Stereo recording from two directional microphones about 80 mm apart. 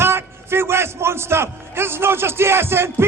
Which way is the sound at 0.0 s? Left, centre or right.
Right.